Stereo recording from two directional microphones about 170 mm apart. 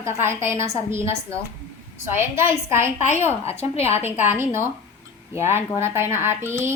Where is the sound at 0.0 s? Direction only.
15° right (ahead or behind).